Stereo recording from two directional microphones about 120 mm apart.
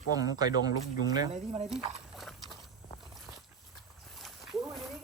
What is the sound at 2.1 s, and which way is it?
Horse, centre (ahead or behind).